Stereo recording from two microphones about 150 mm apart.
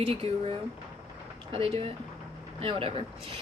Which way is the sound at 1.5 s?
40° right (ahead or behind).